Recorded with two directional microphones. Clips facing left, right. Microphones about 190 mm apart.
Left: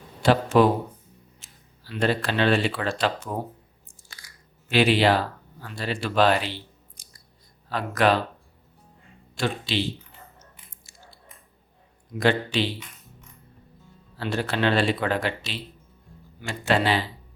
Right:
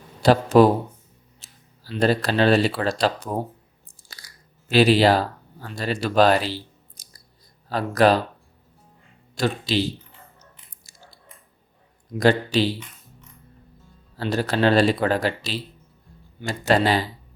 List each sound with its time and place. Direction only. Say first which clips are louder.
0.2 s speech: right 4 dB; 40° right (ahead or behind)
3.8 s crunch: right 4 dB; 35° right (ahead or behind)
4.7 s speech: right 3 dB; 35° right (ahead or behind)
9.3 s speech: right 4 dB; 40° right (ahead or behind)
10.9 s a sound: right 1 dB; 40° right (ahead or behind)
12.1 s speech: right 4 dB; 40° right (ahead or behind)
14.2 s speech: right 4 dB; 40° right (ahead or behind)